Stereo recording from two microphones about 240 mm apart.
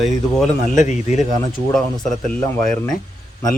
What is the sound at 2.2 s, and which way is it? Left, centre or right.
Speech, centre.